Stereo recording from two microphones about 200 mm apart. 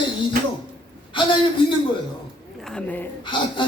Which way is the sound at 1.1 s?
25° left (ahead or behind).